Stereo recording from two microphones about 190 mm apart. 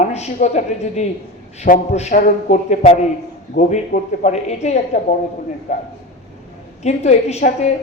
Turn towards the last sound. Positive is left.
turn(degrees=35)  # may be behind; listen again after turning